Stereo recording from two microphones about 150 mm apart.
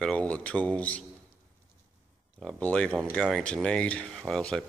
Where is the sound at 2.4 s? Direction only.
5° left (ahead or behind).